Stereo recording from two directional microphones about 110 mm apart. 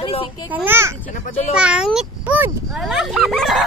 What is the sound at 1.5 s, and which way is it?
A child's voice, 10° right (ahead or behind).